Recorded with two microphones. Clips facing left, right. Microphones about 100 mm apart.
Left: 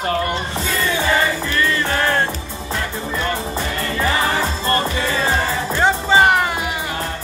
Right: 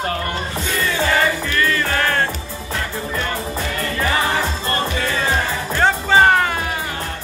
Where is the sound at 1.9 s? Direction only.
25° left (ahead or behind).